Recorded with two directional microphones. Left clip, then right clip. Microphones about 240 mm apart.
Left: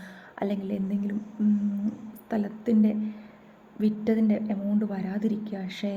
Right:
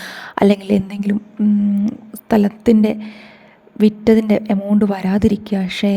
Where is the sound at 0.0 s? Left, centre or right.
Right.